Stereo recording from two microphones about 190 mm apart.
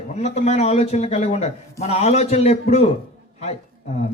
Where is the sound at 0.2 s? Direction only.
35° left (ahead or behind).